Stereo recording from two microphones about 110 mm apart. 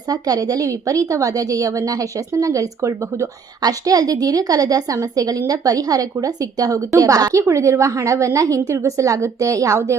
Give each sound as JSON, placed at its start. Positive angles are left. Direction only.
{"t": 0.1, "sound": "a woman's voice", "side_deg": -35}